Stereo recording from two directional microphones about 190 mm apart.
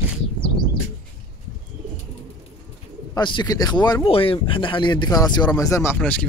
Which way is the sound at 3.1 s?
25° left (ahead or behind).